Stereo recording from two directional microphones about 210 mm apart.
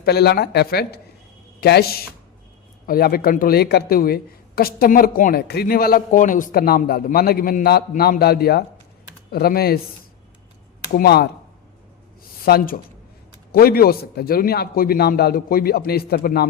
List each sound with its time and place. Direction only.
0.0 s speech: 50° left (ahead or behind)
10.9 s speech: 50° left (ahead or behind)
12.5 s speech: 45° left (ahead or behind)